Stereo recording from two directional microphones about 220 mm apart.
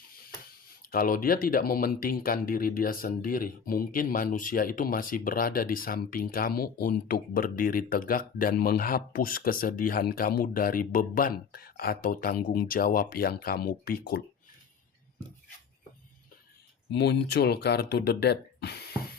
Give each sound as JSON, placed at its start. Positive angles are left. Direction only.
{"t": 0.9, "sound": "speech", "side_deg": 40}
{"t": 16.9, "sound": "speech", "side_deg": 50}